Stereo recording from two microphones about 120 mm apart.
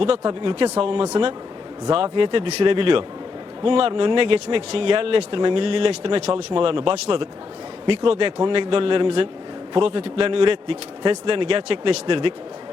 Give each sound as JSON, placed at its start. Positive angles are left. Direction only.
{"t": 0.3, "sound": "speech", "side_deg": -40}